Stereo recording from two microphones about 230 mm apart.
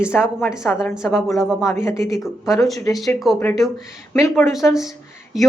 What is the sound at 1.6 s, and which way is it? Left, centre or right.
Speech, centre.